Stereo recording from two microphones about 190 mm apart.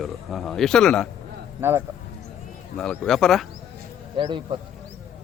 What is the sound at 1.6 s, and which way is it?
Speech, 10° right (ahead or behind).